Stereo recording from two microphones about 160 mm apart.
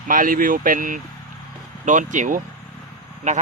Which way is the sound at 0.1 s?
60° right (ahead or behind).